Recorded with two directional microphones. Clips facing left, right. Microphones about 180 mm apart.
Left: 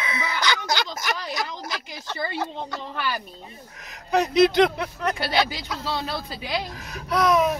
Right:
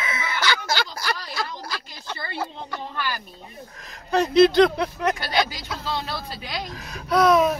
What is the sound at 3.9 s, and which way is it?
Speech, 15° left (ahead or behind).